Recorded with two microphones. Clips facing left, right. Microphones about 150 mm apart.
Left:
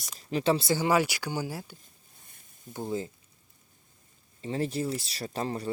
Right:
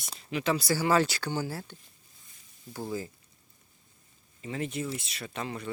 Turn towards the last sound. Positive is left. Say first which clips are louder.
# left 4 dB
turn(degrees=35)  # may be behind; listen again after turning